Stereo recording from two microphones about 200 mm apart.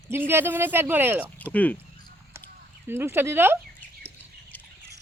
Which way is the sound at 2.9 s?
10° right (ahead or behind).